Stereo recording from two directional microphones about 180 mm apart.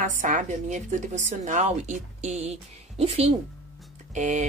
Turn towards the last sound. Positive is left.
turn(degrees=-40)  # may be behind; listen again after turning